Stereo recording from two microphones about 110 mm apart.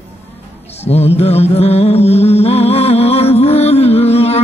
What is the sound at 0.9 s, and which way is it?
Music, 70° left (ahead or behind).